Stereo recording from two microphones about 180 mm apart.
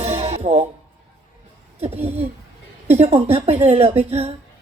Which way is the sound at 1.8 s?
35° right (ahead or behind).